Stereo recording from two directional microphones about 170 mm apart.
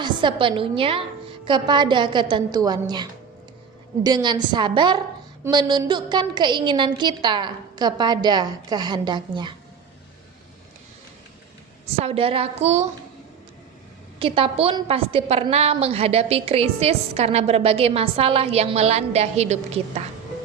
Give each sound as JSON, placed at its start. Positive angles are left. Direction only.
{"t": 0.0, "sound": "a woman's voice", "side_deg": -30}
{"t": 12.0, "sound": "a woman's voice", "side_deg": -35}
{"t": 14.2, "sound": "a woman's voice", "side_deg": -30}